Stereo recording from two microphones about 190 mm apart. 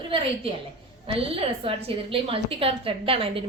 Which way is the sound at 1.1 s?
30° right (ahead or behind).